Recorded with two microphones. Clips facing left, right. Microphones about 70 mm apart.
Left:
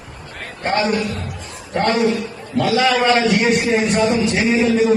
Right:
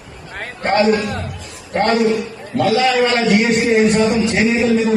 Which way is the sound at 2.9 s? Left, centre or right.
Left.